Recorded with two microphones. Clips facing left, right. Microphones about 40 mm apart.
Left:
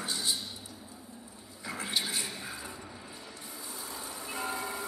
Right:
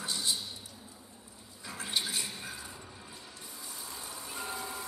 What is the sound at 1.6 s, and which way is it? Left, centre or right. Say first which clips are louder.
Bathtub: left 2 dB; left.